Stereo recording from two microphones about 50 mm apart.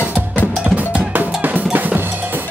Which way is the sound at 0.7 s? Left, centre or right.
Right.